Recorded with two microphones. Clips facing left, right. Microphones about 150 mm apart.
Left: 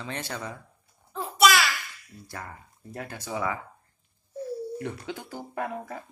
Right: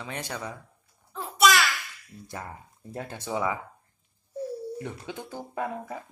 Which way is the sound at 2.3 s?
20° right (ahead or behind).